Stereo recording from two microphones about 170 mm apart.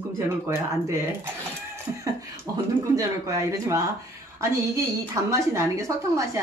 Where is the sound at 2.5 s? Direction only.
20° right (ahead or behind).